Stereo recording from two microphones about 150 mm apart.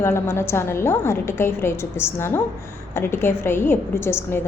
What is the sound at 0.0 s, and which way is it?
A woman's voice, 15° left (ahead or behind).